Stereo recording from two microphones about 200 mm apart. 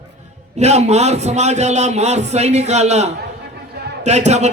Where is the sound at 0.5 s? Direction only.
35° right (ahead or behind).